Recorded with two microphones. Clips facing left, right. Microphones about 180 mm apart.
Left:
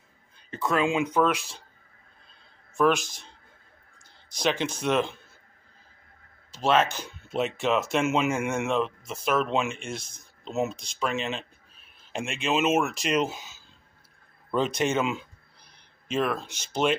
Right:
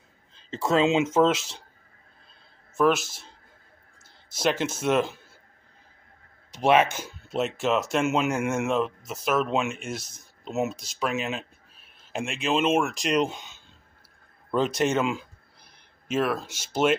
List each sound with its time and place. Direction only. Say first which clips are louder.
0.3 s speech: right 3 dB; 25° right (ahead or behind)
2.8 s speech: right 1 dB; 5° right (ahead or behind)
4.3 s speech: right 1 dB; 5° right (ahead or behind)
6.5 s speech: right 3 dB; 15° right (ahead or behind)
7.0 s speech: right 1 dB; centre (ahead or behind)